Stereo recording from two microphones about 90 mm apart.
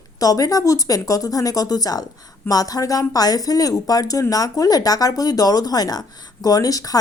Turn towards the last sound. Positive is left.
turn(degrees=40)  # may be behind; listen again after turning